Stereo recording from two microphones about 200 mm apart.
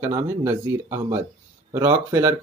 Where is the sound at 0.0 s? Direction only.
15° right (ahead or behind).